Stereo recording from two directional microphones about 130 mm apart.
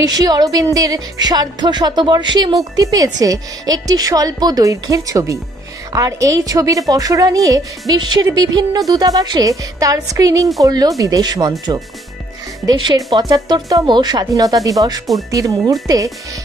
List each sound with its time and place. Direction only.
0.0 s speech: 30° right (ahead or behind)
12.6 s speech: 35° right (ahead or behind)